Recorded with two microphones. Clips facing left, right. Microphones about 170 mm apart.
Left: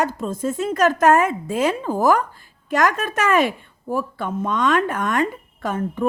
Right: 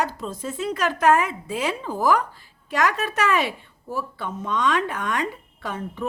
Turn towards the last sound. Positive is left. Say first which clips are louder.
# left 7 dB
turn(degrees=50)  # may be behind; listen again after turning